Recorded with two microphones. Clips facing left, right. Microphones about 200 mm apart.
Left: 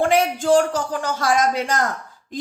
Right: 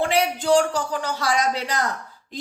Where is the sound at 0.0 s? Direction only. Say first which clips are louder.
Left 3 dB; 50° left (ahead or behind).